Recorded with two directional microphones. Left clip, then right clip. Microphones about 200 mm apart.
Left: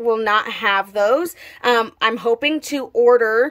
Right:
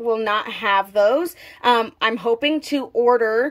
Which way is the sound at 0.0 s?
10° left (ahead or behind).